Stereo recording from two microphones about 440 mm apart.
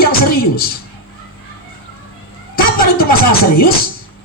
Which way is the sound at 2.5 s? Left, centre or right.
Centre.